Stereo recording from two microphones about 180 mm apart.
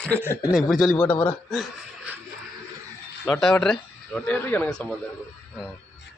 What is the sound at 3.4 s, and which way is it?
Speech, 5° left (ahead or behind).